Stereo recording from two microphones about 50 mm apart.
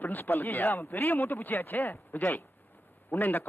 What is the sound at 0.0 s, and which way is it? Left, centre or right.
Speech, left.